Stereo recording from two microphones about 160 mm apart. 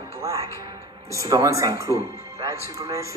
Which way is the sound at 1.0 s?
20° right (ahead or behind).